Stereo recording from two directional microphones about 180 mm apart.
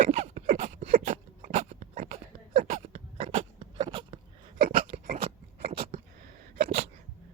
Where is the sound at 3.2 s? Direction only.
35° right (ahead or behind).